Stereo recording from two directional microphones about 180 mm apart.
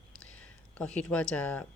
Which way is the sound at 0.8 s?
5° left (ahead or behind).